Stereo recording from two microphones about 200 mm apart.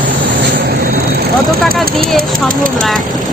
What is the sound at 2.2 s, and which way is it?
Speech, 45° right (ahead or behind).